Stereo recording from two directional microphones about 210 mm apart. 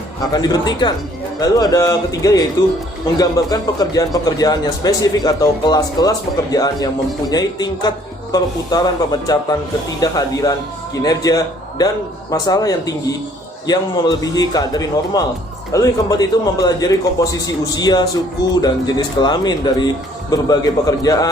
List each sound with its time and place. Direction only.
0.2 s a man's voice: 20° left (ahead or behind)